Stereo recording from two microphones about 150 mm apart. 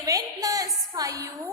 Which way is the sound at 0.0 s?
25° right (ahead or behind).